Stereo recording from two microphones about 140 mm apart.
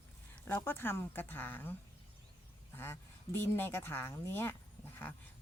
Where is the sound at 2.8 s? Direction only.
15° left (ahead or behind).